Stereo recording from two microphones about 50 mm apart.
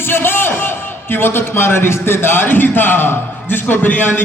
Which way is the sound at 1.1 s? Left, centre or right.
Left.